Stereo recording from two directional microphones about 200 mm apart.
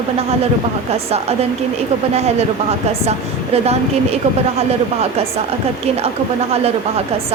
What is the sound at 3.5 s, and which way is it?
Speech, 30° right (ahead or behind).